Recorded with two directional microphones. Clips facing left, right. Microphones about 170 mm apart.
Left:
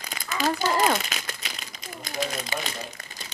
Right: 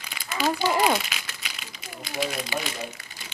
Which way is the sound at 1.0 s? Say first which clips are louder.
Left 3 dB; 40° left (ahead or behind).